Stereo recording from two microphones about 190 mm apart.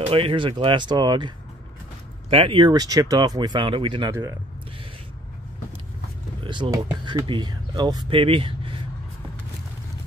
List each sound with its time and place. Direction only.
0.0 s speech: 30° right (ahead or behind)
4.1 s speech: 15° right (ahead or behind)
6.4 s speech: 25° right (ahead or behind)